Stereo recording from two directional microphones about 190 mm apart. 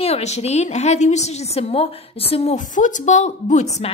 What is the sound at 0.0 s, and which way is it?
A woman's voice, 35° left (ahead or behind).